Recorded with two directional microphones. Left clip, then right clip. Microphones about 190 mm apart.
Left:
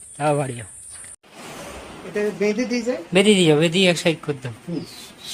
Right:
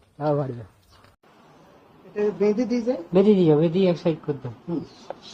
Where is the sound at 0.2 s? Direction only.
25° left (ahead or behind).